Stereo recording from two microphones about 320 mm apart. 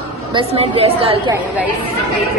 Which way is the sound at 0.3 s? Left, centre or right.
Centre.